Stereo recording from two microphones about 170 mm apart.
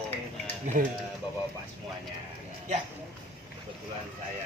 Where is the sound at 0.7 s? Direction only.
45° right (ahead or behind).